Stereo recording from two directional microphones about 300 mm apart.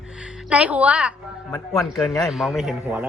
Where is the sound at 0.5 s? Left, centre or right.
Centre.